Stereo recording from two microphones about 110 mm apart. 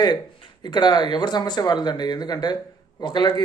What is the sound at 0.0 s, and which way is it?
Speech, 45° left (ahead or behind).